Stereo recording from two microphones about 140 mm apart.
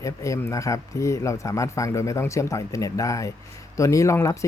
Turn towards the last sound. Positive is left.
turn(degrees=20)  # may be behind; listen again after turning